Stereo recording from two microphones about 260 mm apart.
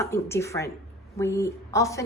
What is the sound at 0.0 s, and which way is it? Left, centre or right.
A woman's voice, centre.